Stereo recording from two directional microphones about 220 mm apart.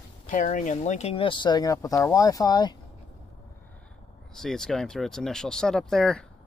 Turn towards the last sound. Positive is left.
turn(degrees=5)  # may be behind; listen again after turning